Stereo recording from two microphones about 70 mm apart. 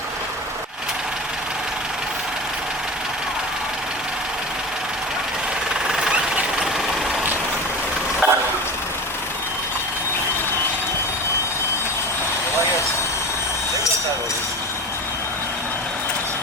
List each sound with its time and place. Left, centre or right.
5.9 s vehicle: centre
8.2 s vehicle: right